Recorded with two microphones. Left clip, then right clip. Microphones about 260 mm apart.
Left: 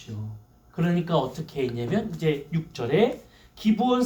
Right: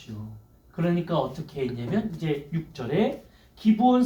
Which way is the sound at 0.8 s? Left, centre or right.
Left.